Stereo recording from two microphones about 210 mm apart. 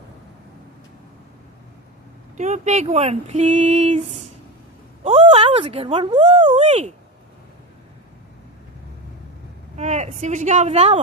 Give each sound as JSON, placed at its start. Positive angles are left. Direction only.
{"t": 2.4, "sound": "speech", "side_deg": -35}
{"t": 5.0, "sound": "speech", "side_deg": -30}
{"t": 9.7, "sound": "speech", "side_deg": -30}